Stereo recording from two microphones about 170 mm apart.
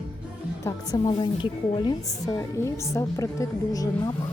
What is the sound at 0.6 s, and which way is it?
A woman's voice, 20° left (ahead or behind).